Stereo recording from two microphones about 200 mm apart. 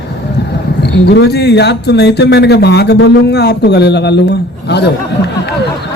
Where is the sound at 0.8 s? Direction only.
55° left (ahead or behind).